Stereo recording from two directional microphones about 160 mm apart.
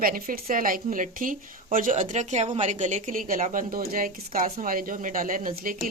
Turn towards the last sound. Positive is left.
turn(degrees=-60)  # may be behind; listen again after turning